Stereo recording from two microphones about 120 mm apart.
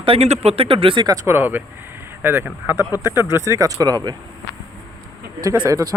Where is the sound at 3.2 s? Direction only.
25° right (ahead or behind).